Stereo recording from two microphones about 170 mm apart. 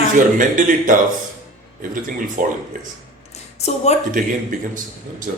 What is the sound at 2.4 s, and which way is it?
Speech, 50° right (ahead or behind).